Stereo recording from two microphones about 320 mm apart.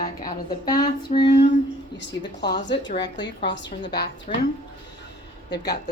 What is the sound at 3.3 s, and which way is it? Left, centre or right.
Speech, left.